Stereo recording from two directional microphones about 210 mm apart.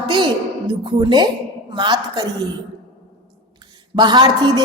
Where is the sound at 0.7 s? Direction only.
20° right (ahead or behind).